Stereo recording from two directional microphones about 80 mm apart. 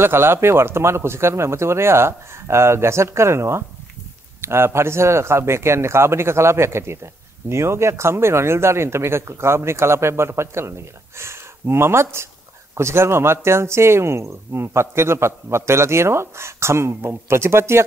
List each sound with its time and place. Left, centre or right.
0.0 s speech: right